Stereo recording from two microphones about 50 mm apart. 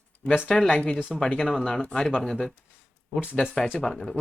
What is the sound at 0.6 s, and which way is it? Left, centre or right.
Speech, left.